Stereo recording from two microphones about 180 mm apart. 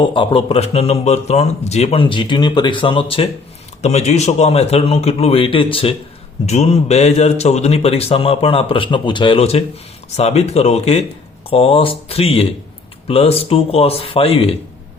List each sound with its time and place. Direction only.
0.0 s speech: 30° left (ahead or behind)